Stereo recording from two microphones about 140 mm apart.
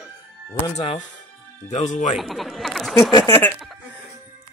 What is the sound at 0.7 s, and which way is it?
Speech, 40° left (ahead or behind).